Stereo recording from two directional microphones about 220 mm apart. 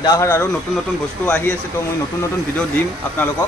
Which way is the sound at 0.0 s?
15° left (ahead or behind).